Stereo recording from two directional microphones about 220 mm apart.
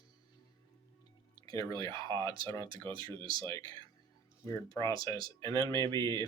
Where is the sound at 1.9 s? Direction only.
20° right (ahead or behind).